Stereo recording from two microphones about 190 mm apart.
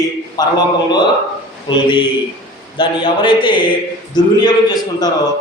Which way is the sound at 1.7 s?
25° left (ahead or behind).